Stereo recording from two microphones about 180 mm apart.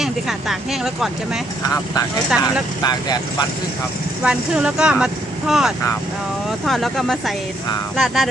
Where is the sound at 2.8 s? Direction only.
20° left (ahead or behind).